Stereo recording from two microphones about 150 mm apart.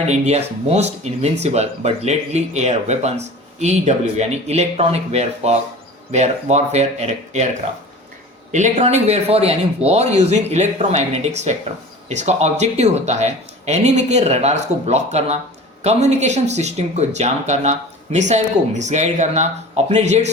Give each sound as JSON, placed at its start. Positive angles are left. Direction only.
{"t": 0.1, "sound": "speech", "side_deg": -45}
{"t": 8.5, "sound": "speech", "side_deg": -50}